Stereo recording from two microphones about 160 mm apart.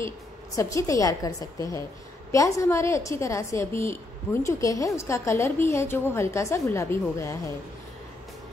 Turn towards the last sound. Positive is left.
turn(degrees=15)  # may be behind; listen again after turning